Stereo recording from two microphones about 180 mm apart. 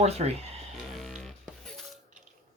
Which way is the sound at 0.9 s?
Centre (ahead or behind).